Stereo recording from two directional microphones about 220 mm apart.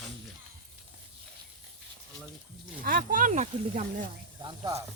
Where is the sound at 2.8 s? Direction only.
40° right (ahead or behind).